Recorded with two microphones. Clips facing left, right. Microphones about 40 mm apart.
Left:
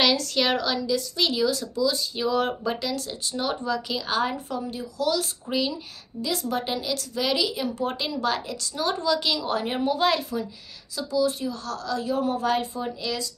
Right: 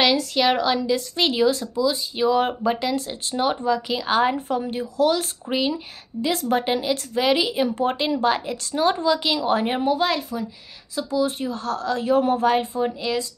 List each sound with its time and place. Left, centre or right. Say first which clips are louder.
0.0 s a woman's voice: right 3 dB; centre
0.8 s speech: right 3 dB; right
1.8 s speech: right 3 dB; right
4.5 s speech: right 6 dB; right
9.8 s speech: right 2 dB; centre
11.0 s speech: right 2 dB; right